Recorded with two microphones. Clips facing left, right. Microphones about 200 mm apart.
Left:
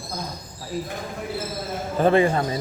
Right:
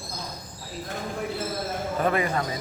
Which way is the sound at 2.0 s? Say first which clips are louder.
Left 7 dB; 30° left (ahead or behind).